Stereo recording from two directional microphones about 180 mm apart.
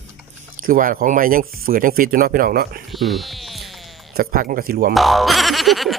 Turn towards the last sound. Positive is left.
turn(degrees=0)  # may be behind; listen again after turning